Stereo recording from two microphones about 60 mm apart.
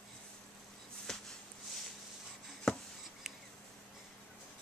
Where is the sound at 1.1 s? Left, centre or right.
Centre.